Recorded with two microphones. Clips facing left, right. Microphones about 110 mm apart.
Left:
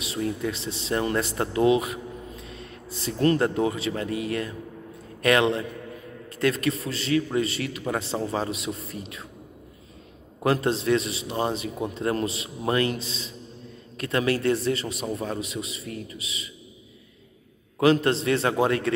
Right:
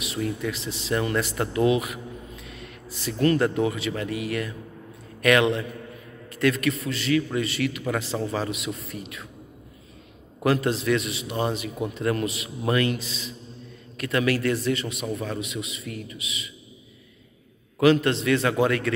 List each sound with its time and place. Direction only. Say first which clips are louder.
0.0 s a man's voice: even; 30° left (ahead or behind)
10.4 s a man's voice: even; 30° left (ahead or behind)
17.7 s a man's voice: right 1 dB; 35° left (ahead or behind)